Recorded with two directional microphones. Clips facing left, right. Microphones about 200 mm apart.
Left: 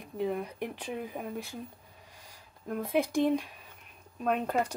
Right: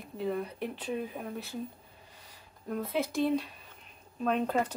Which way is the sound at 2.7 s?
15° left (ahead or behind).